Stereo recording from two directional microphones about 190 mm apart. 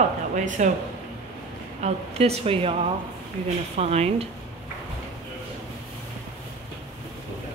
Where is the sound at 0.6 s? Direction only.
40° right (ahead or behind).